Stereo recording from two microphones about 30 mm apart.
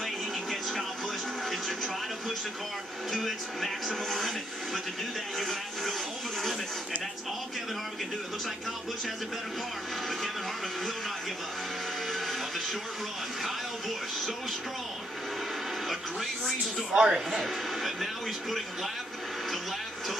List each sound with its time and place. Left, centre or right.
0.0 s television: centre
3.1 s speech: centre
5.4 s speech: centre
12.1 s music: centre
13.4 s speech: centre
16.9 s speech: right
17.3 s speech: centre